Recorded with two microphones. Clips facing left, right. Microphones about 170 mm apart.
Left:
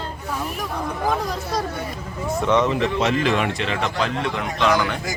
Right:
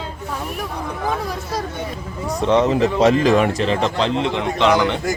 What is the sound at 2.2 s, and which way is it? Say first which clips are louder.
Speech: right 3 dB; 35° right (ahead or behind).